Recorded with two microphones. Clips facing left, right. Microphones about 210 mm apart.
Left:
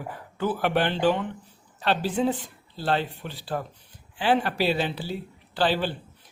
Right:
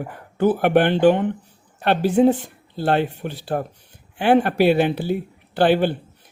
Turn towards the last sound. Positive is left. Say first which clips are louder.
# right 8 dB
turn(degrees=-55)  # may be behind; listen again after turning